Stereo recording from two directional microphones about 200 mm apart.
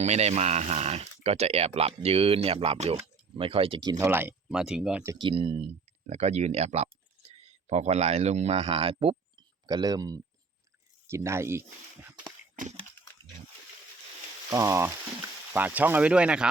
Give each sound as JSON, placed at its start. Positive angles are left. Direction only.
{"t": 0.0, "sound": "speech", "side_deg": -35}
{"t": 4.0, "sound": "speech", "side_deg": -10}
{"t": 5.1, "sound": "speech", "side_deg": -25}
{"t": 14.5, "sound": "speech", "side_deg": -15}